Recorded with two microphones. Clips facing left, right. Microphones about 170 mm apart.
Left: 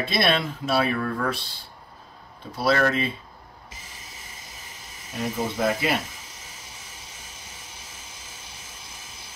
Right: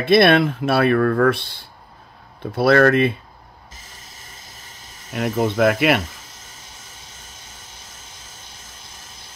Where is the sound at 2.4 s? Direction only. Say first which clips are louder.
Right 8 dB; 60° right (ahead or behind).